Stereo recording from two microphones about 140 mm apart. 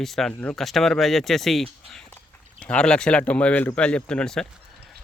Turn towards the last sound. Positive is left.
turn(degrees=5)  # may be behind; listen again after turning